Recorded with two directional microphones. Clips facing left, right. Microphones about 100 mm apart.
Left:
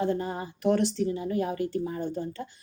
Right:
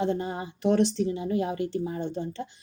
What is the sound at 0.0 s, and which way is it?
A woman's voice, 20° right (ahead or behind).